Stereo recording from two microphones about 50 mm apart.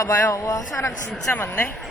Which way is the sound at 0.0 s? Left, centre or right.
Left.